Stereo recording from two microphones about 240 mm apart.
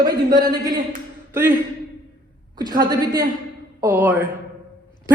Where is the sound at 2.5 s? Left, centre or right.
Centre.